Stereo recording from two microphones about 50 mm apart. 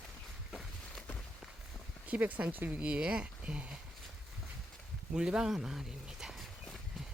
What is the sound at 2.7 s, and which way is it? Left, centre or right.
Speech, right.